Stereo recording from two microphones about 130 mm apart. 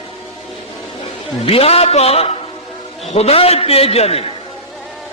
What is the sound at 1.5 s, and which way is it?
A man's voice, 50° left (ahead or behind).